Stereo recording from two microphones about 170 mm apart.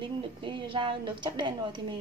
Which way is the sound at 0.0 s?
30° right (ahead or behind).